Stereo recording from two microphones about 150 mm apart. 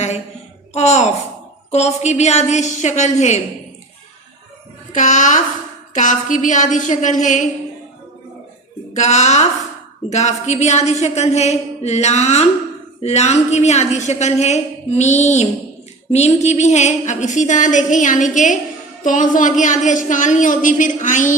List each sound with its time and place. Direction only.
0.7 s a woman's voice: 50° left (ahead or behind)
4.9 s a woman's voice: 55° left (ahead or behind)
8.9 s a woman's voice: 50° left (ahead or behind)